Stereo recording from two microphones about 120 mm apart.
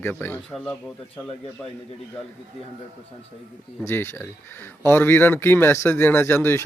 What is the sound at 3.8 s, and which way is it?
Speech, 20° left (ahead or behind).